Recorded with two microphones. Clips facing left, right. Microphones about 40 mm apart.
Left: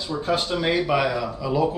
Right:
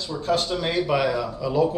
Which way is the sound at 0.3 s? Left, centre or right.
Centre.